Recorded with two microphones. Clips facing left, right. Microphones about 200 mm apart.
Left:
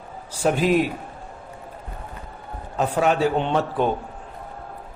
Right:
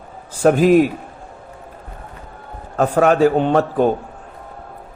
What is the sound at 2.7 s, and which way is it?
A man's voice, 50° right (ahead or behind).